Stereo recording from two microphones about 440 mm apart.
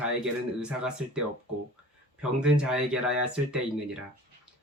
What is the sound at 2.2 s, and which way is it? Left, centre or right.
Speech, centre.